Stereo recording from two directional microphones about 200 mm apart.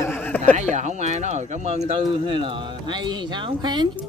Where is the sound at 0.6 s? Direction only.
35° right (ahead or behind).